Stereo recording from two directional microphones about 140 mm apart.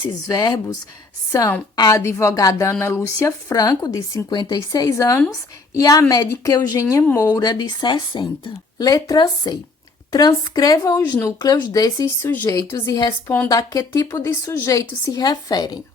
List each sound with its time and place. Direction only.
0.3 s a woman's voice: 30° left (ahead or behind)